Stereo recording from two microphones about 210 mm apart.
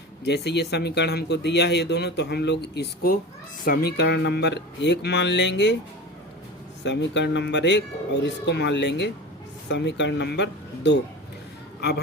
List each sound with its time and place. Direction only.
0.3 s speech: 55° left (ahead or behind)
6.8 s speech: 60° left (ahead or behind)